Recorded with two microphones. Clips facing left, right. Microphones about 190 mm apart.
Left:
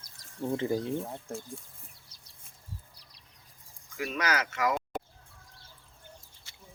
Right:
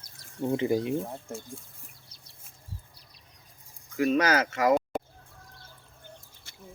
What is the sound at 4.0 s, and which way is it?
Speech, 35° right (ahead or behind).